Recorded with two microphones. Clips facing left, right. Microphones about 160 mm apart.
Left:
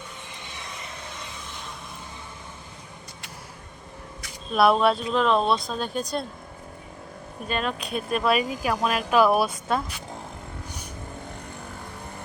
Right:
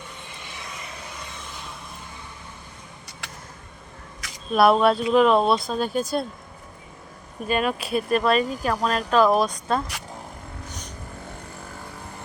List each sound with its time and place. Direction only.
3.2 s a sound: 85° right
4.5 s speech: centre (ahead or behind)
7.4 s speech: 5° right (ahead or behind)
10.7 s vehicle: 10° left (ahead or behind)